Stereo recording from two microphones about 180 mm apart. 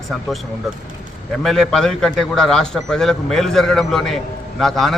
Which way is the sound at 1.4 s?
Centre (ahead or behind).